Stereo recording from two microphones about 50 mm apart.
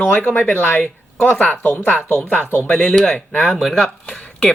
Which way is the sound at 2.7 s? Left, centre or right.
Left.